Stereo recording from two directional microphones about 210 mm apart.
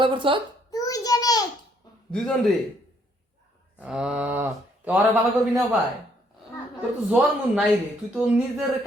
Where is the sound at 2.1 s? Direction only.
Centre (ahead or behind).